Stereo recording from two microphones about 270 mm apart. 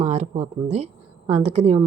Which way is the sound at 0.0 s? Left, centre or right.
Right.